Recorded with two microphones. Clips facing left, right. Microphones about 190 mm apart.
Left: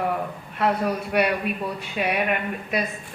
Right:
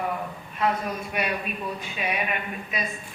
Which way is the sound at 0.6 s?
65° left (ahead or behind).